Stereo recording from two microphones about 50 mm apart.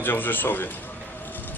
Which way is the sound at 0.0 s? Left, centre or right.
Left.